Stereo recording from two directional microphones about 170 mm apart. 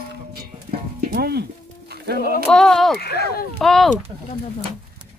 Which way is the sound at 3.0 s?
70° left (ahead or behind).